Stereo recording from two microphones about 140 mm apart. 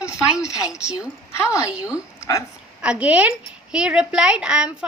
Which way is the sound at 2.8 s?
10° right (ahead or behind).